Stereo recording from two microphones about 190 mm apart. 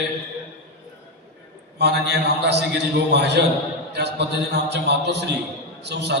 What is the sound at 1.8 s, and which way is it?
A man's voice, 60° right (ahead or behind).